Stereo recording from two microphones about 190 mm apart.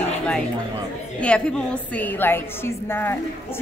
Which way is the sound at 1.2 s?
5° left (ahead or behind).